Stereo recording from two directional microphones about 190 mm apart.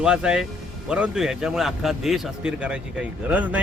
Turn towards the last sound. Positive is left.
turn(degrees=-5)  # may be behind; listen again after turning